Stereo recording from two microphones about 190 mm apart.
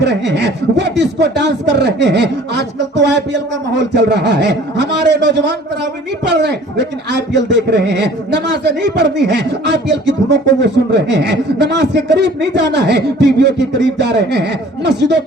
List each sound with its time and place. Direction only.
0.0 s speech: 65° right (ahead or behind)